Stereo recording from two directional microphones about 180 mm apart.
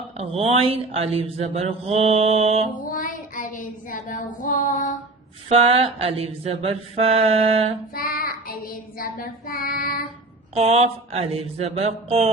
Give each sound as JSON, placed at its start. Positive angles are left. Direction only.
{"t": 0.2, "sound": "speech", "side_deg": -35}
{"t": 2.7, "sound": "child singing", "side_deg": 50}
{"t": 5.5, "sound": "speech", "side_deg": -35}
{"t": 7.9, "sound": "child singing", "side_deg": 55}
{"t": 10.5, "sound": "speech", "side_deg": -35}